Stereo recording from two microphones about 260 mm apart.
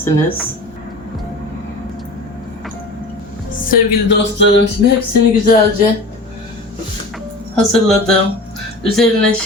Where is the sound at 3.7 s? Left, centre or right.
Left.